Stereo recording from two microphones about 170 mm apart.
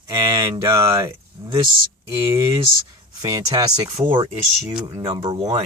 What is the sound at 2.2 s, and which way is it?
Speech, 20° right (ahead or behind).